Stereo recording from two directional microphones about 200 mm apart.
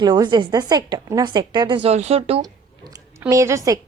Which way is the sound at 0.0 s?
20° right (ahead or behind).